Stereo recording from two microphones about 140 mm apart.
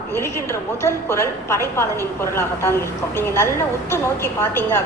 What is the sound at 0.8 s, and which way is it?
A woman's voice, 20° left (ahead or behind).